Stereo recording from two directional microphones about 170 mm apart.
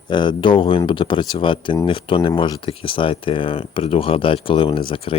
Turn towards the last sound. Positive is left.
turn(degrees=30)  # may be behind; listen again after turning